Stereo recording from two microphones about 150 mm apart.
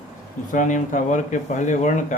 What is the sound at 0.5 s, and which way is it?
Speech, 60° left (ahead or behind).